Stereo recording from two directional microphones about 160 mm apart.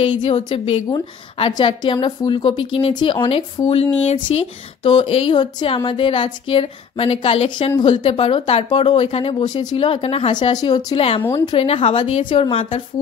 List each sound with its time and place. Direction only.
0.0 s speech: 30° left (ahead or behind)
11.0 s speech: 35° left (ahead or behind)